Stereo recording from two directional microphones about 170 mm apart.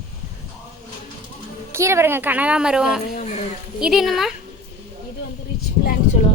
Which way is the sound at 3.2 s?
45° left (ahead or behind).